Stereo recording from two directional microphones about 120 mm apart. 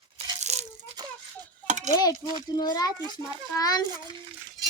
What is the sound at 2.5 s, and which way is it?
A woman's voice, 35° left (ahead or behind).